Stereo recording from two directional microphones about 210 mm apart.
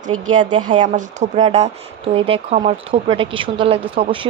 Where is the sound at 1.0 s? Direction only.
35° right (ahead or behind).